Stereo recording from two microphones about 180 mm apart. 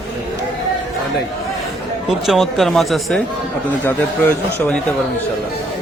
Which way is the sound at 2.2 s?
Centre (ahead or behind).